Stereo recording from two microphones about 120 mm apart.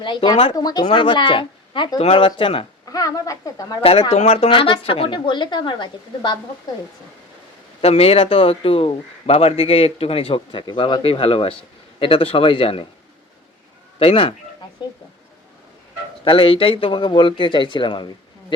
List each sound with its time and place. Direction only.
0.0 s a man's voice: 40° left (ahead or behind)
2.9 s speech: 30° left (ahead or behind)
3.8 s a man's voice: 50° left (ahead or behind)
4.1 s a man's voice: 65° left (ahead or behind); by 6.3 s 40° left (ahead or behind)
7.8 s a man's voice: 60° left (ahead or behind)
14.0 s a man's voice: 50° left (ahead or behind)
16.2 s a man's voice: 50° left (ahead or behind)